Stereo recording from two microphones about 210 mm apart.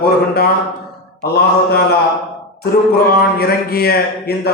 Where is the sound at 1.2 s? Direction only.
50° left (ahead or behind).